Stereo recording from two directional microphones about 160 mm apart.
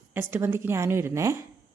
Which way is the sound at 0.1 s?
15° right (ahead or behind).